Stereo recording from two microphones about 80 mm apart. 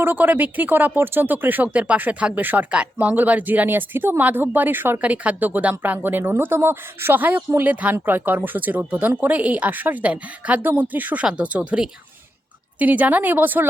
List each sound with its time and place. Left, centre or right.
0.0 s speech: right